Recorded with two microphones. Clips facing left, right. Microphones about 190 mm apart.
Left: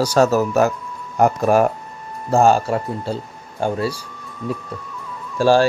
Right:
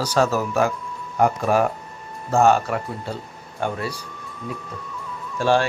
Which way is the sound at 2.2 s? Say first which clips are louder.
Left 2 dB; 35° left (ahead or behind).